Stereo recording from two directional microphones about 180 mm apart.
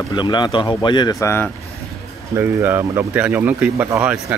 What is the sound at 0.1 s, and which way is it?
Speech, 25° left (ahead or behind).